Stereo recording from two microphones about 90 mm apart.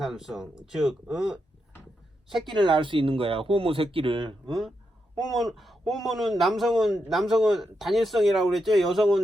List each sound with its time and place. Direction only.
0.0 s speech: 5° right (ahead or behind)
2.5 s speech: 65° right (ahead or behind)
5.1 s speech: centre (ahead or behind)